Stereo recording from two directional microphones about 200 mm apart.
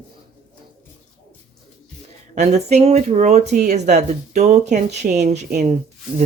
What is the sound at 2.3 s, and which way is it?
Speech, 35° right (ahead or behind).